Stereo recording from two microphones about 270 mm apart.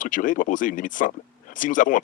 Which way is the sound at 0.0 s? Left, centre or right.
Left.